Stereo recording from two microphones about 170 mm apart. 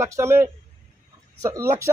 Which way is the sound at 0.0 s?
15° right (ahead or behind).